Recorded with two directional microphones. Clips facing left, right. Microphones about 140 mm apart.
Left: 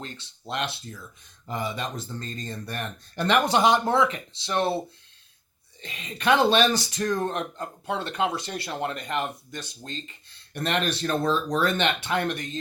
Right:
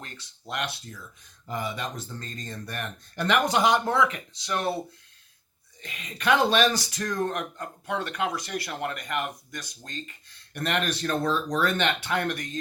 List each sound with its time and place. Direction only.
0.0 s speech: 25° left (ahead or behind)
5.8 s speech: 30° left (ahead or behind)